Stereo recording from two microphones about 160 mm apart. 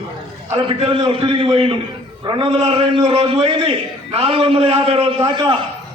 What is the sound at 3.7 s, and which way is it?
A man's voice, 35° right (ahead or behind).